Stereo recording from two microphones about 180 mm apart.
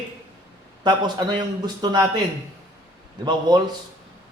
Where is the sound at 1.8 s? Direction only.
25° right (ahead or behind).